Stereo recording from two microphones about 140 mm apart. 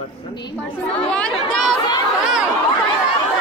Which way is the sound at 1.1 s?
5° left (ahead or behind).